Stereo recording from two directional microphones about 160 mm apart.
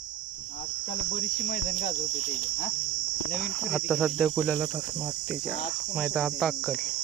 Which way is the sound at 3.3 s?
5° right (ahead or behind).